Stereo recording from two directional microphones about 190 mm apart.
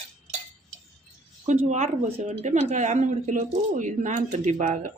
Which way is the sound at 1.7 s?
35° right (ahead or behind).